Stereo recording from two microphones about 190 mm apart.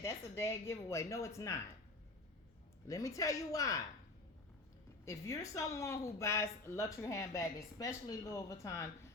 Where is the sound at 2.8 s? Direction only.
15° left (ahead or behind).